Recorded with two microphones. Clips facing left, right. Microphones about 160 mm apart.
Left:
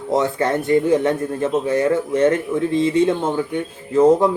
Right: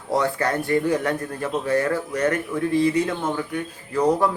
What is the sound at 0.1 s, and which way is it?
Speech, 25° left (ahead or behind).